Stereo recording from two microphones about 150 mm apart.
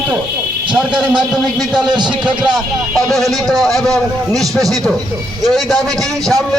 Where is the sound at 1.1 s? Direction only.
30° right (ahead or behind).